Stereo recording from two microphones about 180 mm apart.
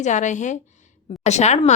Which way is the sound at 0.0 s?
40° left (ahead or behind).